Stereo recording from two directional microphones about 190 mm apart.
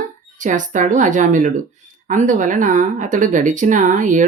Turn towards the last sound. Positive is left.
turn(degrees=-40)  # may be behind; listen again after turning